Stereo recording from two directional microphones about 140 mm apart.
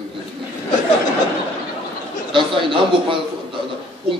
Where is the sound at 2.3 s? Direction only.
35° right (ahead or behind).